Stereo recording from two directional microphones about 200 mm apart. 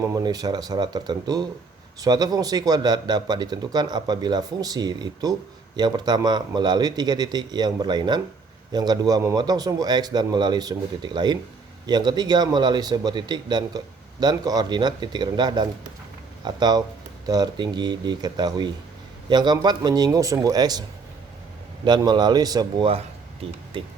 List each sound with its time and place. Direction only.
0.0 s speech: 15° right (ahead or behind)
21.8 s a man's voice: 20° right (ahead or behind)